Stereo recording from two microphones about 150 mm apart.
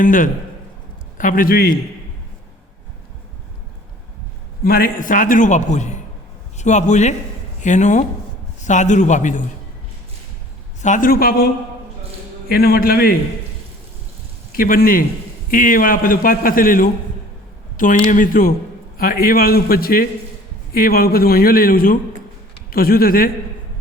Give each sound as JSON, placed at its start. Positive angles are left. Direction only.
{"t": 0.0, "sound": "a man's voice", "side_deg": 60}
{"t": 4.6, "sound": "a man's voice", "side_deg": 85}
{"t": 10.8, "sound": "a man's voice", "side_deg": 60}
{"t": 12.5, "sound": "a man's voice", "side_deg": 90}
{"t": 14.5, "sound": "a man's voice", "side_deg": 75}